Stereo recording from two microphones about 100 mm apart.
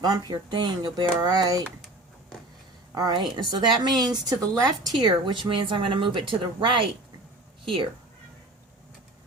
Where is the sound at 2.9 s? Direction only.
45° right (ahead or behind); by 7.9 s 60° right (ahead or behind).